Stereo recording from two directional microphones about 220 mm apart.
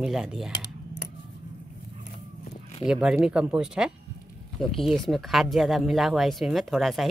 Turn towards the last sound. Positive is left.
turn(degrees=0)  # may be behind; listen again after turning